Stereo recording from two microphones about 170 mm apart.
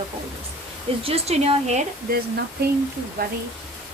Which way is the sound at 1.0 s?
35° right (ahead or behind).